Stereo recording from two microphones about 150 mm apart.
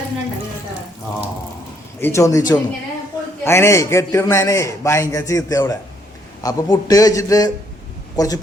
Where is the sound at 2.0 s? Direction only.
20° left (ahead or behind).